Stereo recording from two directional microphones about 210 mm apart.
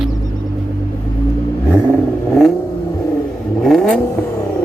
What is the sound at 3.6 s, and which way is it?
Vehicle, centre (ahead or behind).